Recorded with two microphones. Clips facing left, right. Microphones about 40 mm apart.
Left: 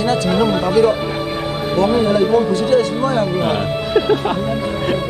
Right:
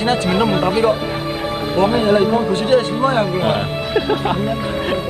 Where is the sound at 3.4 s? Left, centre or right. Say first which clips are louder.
Even; centre.